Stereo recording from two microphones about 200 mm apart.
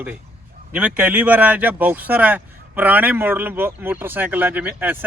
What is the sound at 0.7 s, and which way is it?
Speech, 5° right (ahead or behind).